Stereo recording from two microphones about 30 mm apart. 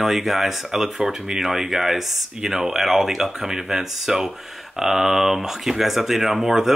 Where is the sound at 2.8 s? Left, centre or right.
Centre.